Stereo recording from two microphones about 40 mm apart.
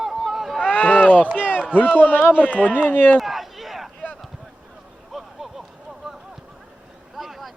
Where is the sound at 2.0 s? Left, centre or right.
Left.